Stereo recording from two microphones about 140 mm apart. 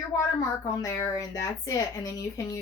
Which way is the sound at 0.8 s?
25° left (ahead or behind).